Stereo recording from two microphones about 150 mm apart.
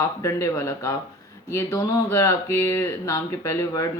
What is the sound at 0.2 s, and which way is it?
Speech, 20° left (ahead or behind).